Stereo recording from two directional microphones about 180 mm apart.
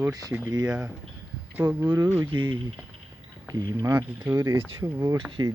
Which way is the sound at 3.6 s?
20° right (ahead or behind).